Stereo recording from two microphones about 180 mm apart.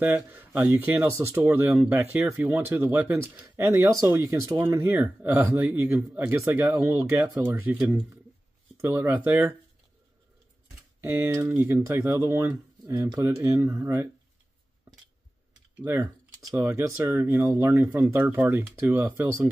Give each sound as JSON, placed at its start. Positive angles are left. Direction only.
{"t": 0.0, "sound": "speech", "side_deg": -10}
{"t": 7.4, "sound": "speech", "side_deg": -10}
{"t": 11.2, "sound": "speech", "side_deg": -10}
{"t": 15.8, "sound": "speech", "side_deg": -15}